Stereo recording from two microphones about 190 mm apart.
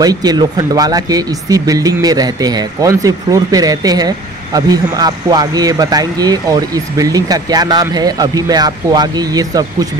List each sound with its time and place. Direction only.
0.0 s speech: 20° right (ahead or behind)